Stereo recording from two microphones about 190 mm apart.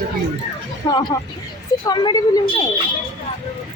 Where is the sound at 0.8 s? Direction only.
20° left (ahead or behind).